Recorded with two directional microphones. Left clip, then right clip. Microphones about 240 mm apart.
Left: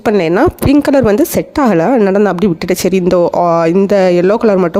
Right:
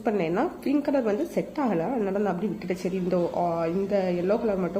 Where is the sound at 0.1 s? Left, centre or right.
Left.